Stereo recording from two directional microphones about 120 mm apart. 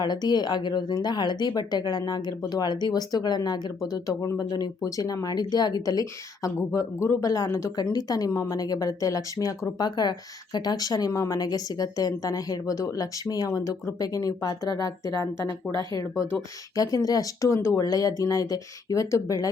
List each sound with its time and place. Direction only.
0.0 s speech: 35° left (ahead or behind)
15.8 s speech: 40° right (ahead or behind)
16.7 s speech: 30° left (ahead or behind)